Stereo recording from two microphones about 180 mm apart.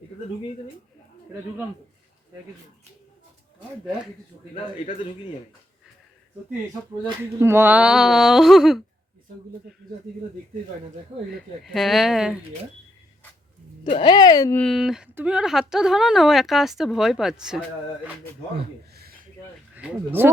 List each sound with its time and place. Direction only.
7.0 s a woman's voice: 15° right (ahead or behind)
11.6 s a woman's voice: centre (ahead or behind)
13.9 s speech: 25° left (ahead or behind)
14.6 s a woman's voice: centre (ahead or behind)
20.2 s speech: 10° right (ahead or behind)